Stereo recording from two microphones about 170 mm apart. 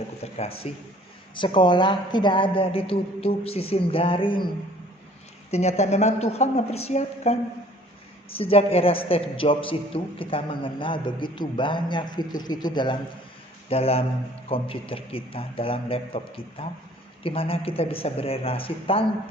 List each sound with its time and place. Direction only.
0.2 s a woman's voice: 35° left (ahead or behind)
5.5 s a woman's voice: 40° left (ahead or behind)
8.4 s a man's voice: 35° left (ahead or behind)